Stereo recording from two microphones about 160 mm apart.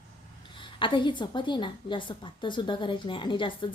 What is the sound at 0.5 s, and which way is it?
A woman's voice, 30° left (ahead or behind).